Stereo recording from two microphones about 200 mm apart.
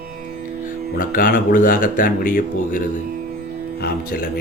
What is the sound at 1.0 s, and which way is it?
A man's voice, 45° left (ahead or behind).